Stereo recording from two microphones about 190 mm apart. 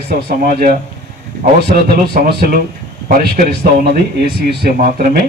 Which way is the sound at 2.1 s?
55° right (ahead or behind).